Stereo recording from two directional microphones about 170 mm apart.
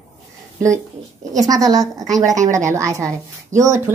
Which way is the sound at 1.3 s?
20° right (ahead or behind).